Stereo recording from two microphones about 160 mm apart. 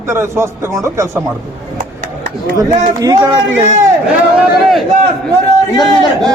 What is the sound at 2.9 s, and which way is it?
Speech, 20° right (ahead or behind).